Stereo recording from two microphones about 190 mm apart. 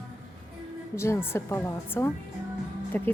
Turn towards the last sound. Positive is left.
turn(degrees=10)  # may be behind; listen again after turning